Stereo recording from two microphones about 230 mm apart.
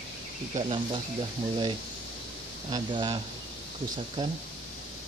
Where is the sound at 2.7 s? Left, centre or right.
Centre.